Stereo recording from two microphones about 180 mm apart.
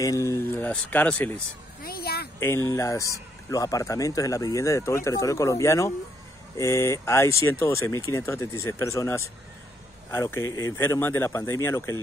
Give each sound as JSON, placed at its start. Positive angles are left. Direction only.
{"t": 0.0, "sound": "speech", "side_deg": 15}
{"t": 1.8, "sound": "a sound", "side_deg": 55}
{"t": 2.7, "sound": "speech", "side_deg": 15}